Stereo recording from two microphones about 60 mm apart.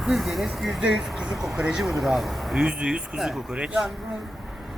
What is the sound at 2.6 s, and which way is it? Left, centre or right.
Speech, centre.